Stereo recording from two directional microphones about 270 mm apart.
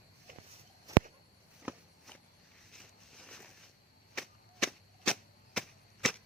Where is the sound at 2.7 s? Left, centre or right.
Centre.